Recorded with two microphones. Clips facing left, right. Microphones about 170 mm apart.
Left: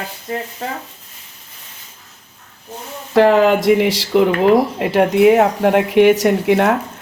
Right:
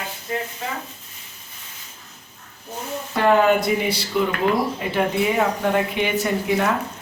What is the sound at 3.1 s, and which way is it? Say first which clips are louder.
Speech: left 5 dB; 90° left.